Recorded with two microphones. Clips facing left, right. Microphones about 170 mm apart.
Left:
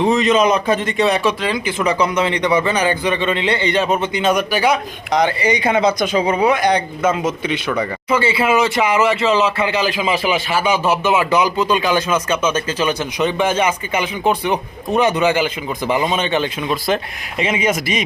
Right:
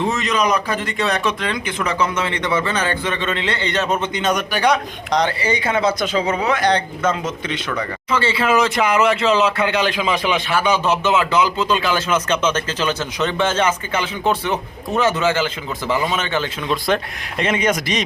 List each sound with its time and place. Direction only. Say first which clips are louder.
0.0 s speech: left 6 dB; 20° left (ahead or behind)
16.8 s speech: even; 5° left (ahead or behind)